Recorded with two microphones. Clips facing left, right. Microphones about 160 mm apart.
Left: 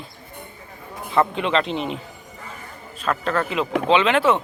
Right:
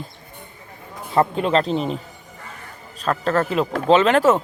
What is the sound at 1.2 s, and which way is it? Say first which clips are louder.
Speech: right 2 dB; 40° right (ahead or behind).